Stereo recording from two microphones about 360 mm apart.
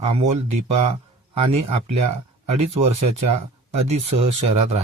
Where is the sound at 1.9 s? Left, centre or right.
Right.